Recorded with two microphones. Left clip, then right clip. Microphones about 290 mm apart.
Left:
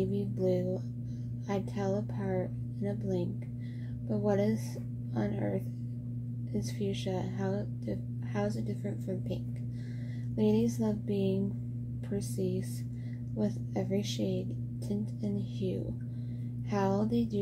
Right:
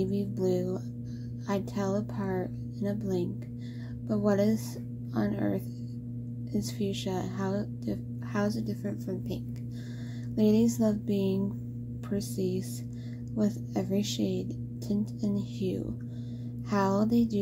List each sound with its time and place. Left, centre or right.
0.0 s music: right
1.5 s speech: right